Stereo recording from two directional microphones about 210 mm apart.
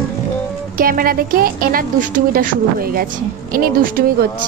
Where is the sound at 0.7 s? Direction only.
45° right (ahead or behind).